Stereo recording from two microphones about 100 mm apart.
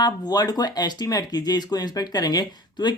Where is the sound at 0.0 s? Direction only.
40° left (ahead or behind).